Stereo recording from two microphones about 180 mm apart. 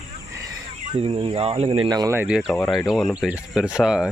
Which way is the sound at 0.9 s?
30° right (ahead or behind).